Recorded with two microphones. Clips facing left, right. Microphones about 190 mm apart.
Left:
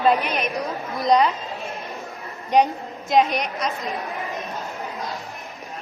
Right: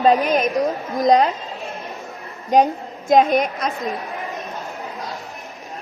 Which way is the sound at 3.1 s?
50° right (ahead or behind).